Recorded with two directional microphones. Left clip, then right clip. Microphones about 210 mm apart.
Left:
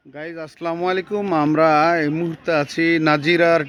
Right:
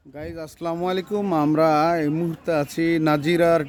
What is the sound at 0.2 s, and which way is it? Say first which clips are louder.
Speech: left 3 dB; 5° right (ahead or behind).